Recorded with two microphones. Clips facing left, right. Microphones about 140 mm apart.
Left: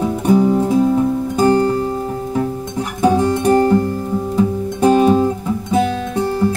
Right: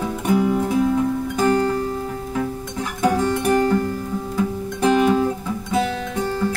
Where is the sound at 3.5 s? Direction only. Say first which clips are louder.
Left 6 dB; 30° left (ahead or behind).